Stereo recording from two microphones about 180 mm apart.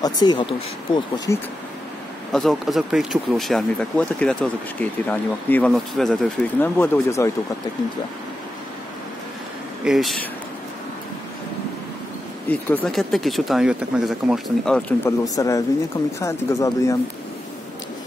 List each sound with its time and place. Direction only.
0.0 s speech: 20° left (ahead or behind)
2.3 s speech: centre (ahead or behind)
9.8 s speech: centre (ahead or behind)
12.4 s speech: 5° left (ahead or behind)
15.0 s speech: 20° left (ahead or behind)